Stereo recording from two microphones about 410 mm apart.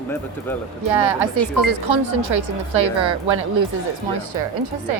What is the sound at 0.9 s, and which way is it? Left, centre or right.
A woman's voice, right.